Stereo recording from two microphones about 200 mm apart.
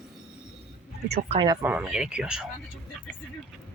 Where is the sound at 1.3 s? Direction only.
25° right (ahead or behind).